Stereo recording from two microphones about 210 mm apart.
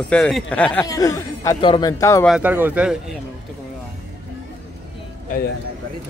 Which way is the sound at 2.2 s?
5° right (ahead or behind).